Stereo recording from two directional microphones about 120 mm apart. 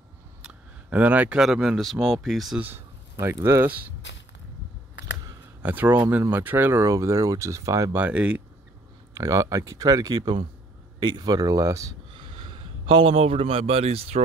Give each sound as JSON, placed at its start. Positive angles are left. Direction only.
{"t": 0.4, "sound": "a sound", "side_deg": -10}
{"t": 1.4, "sound": "speech", "side_deg": -5}
{"t": 2.6, "sound": "a sound", "side_deg": -20}
{"t": 3.4, "sound": "a man's voice", "side_deg": -20}
{"t": 5.6, "sound": "a man's voice", "side_deg": -15}
{"t": 8.0, "sound": "a man's voice", "side_deg": -10}
{"t": 9.1, "sound": "speech", "side_deg": -25}
{"t": 12.4, "sound": "a man's voice", "side_deg": -50}